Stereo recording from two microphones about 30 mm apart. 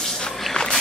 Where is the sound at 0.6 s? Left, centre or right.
Left.